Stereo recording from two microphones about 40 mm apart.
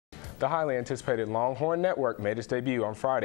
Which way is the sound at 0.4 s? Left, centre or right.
Centre.